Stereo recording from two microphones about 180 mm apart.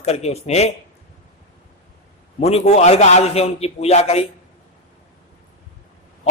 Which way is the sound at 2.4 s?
35° left (ahead or behind).